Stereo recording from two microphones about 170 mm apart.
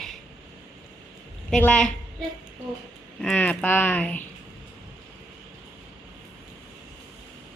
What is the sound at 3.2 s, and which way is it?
Speech, 5° left (ahead or behind).